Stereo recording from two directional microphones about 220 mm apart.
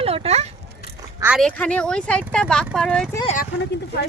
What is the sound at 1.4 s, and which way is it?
Speech, 5° left (ahead or behind).